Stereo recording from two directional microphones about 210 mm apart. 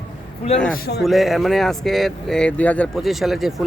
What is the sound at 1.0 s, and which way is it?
Speech, centre (ahead or behind).